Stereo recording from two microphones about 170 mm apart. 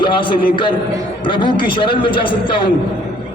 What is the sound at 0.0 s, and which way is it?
A man's voice, 30° left (ahead or behind).